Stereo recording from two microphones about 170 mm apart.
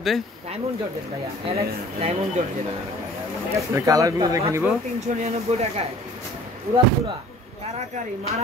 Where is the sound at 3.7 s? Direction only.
20° right (ahead or behind).